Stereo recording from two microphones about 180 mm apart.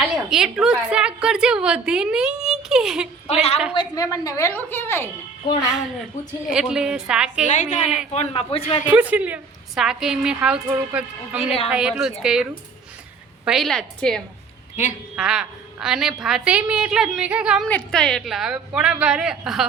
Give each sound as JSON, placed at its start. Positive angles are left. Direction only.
{"t": 0.0, "sound": "a woman's voice", "side_deg": 0}
{"t": 3.2, "sound": "a man's voice", "side_deg": 35}
{"t": 3.8, "sound": "a woman's voice", "side_deg": 20}
{"t": 6.5, "sound": "a woman's voice", "side_deg": -5}
{"t": 7.4, "sound": "a woman's voice", "side_deg": 40}
{"t": 8.9, "sound": "a woman's voice", "side_deg": -10}
{"t": 17.7, "sound": "a woman's voice", "side_deg": 5}